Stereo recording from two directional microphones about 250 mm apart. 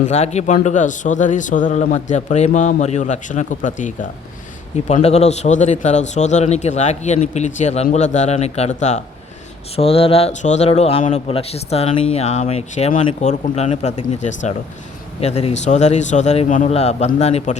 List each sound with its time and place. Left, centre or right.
0.0 s a man's voice: left